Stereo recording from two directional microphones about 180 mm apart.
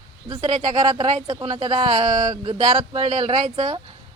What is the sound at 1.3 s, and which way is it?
Speech, 25° right (ahead or behind).